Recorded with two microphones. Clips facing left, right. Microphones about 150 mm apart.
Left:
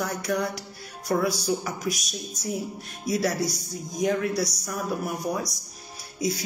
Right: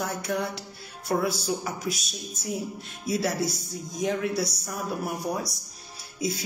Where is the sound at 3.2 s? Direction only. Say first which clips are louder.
Left 1 dB; 25° right (ahead or behind).